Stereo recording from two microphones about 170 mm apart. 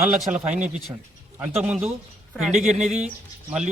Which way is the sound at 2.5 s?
45° right (ahead or behind).